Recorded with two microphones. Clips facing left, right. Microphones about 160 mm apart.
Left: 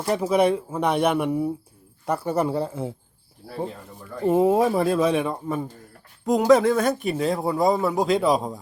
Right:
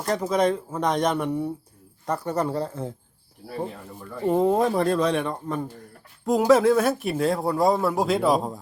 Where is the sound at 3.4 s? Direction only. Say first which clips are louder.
Even; centre (ahead or behind).